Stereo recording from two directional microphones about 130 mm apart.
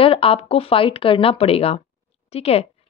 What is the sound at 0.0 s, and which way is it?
Speech, 45° left (ahead or behind).